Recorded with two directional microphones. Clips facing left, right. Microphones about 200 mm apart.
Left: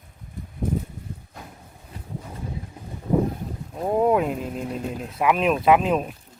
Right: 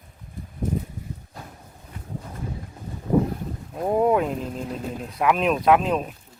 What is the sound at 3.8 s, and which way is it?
Speech, centre (ahead or behind).